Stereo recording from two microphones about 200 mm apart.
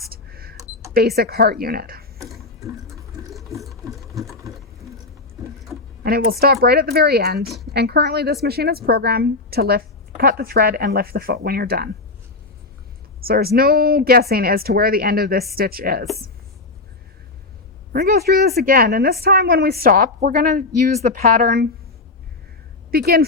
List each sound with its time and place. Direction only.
0.1 s cash register: 50° right (ahead or behind)
0.9 s a woman's voice: 50° right (ahead or behind)
6.0 s a woman's voice: 50° right (ahead or behind)
7.4 s a woman's voice: centre (ahead or behind)
7.7 s a woman's voice: 55° right (ahead or behind)
13.2 s a woman's voice: 50° right (ahead or behind)
17.9 s a woman's voice: 50° right (ahead or behind)
22.9 s speech: 50° right (ahead or behind)